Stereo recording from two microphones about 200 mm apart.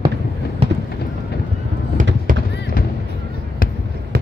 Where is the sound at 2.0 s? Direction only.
40° right (ahead or behind).